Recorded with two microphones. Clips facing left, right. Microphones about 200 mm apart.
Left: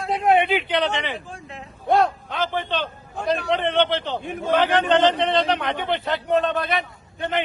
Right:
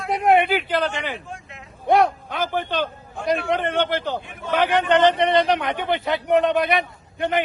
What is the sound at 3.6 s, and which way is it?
Speech, centre (ahead or behind).